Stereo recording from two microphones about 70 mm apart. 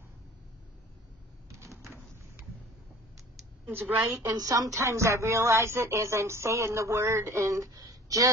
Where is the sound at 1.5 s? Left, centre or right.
Right.